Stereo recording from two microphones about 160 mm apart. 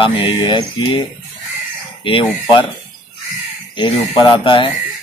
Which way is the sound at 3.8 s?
30° left (ahead or behind).